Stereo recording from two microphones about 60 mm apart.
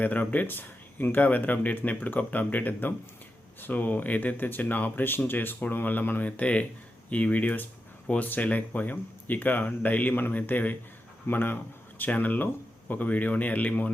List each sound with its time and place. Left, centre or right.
0.0 s speech: left